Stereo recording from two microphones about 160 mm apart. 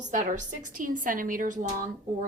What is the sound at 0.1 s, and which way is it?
A woman's voice, 55° right (ahead or behind).